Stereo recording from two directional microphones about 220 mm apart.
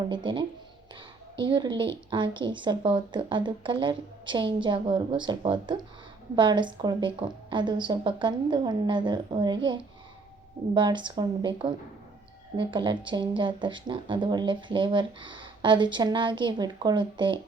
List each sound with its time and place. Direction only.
0.1 s speech: 20° right (ahead or behind)
10.8 s speech: 20° right (ahead or behind)